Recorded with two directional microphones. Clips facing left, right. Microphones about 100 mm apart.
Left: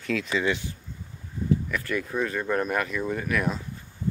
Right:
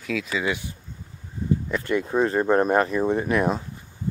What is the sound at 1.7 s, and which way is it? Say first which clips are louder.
Speech: right 5 dB; 25° right (ahead or behind).